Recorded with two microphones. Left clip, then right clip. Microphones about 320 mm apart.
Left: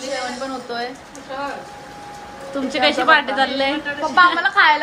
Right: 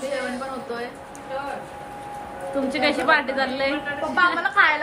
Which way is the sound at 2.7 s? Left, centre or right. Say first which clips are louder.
Left 6 dB; centre.